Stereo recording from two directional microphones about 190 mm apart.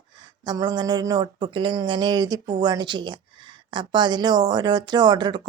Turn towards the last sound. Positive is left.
turn(degrees=-20)  # may be behind; listen again after turning